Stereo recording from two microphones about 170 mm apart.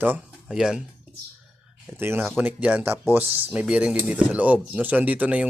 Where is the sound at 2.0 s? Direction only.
15° right (ahead or behind).